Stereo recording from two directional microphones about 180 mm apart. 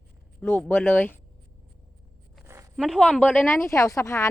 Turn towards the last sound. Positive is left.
turn(degrees=15)  # may be behind; listen again after turning